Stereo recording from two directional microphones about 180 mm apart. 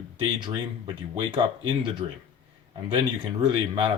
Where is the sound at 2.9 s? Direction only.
25° right (ahead or behind).